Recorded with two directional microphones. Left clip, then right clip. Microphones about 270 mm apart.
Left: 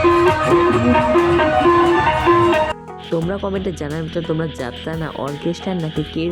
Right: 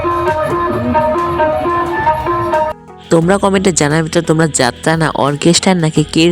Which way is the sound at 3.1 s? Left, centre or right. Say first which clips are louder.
Right 11 dB; right.